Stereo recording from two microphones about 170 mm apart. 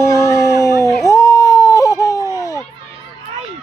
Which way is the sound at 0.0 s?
15° left (ahead or behind).